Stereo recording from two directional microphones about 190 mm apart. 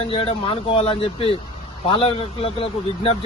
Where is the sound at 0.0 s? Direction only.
30° left (ahead or behind).